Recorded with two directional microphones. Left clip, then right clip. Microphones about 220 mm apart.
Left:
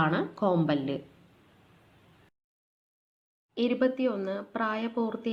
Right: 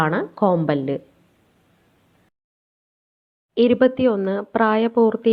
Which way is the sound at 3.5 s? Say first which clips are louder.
Right 11 dB; 35° right (ahead or behind).